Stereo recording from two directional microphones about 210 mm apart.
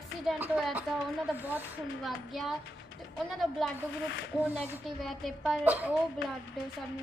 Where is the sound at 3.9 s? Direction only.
65° left (ahead or behind).